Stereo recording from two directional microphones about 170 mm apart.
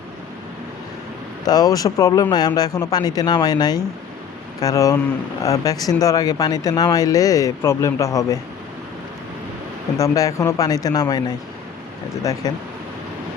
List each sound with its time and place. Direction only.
1.5 s speech: 20° left (ahead or behind)
10.0 s speech: 20° left (ahead or behind)
12.4 s speech: 20° left (ahead or behind)